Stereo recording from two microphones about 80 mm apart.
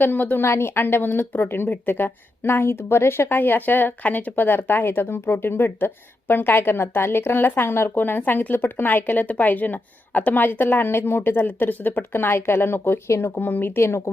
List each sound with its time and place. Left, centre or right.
0.0 s a woman's voice: left